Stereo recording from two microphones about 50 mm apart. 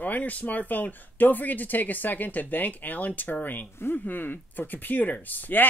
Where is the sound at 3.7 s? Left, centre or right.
Left.